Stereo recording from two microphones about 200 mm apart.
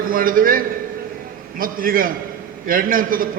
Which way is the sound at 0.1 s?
45° right (ahead or behind).